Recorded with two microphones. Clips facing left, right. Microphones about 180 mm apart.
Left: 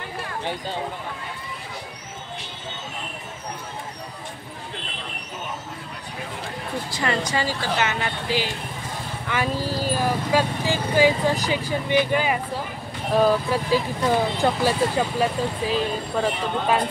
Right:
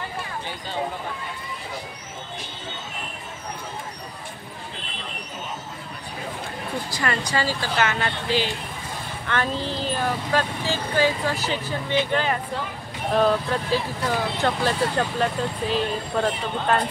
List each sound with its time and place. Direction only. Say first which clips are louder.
6.9 s speech: left 2 dB; 20° left (ahead or behind); by 16.8 s 5° left (ahead or behind)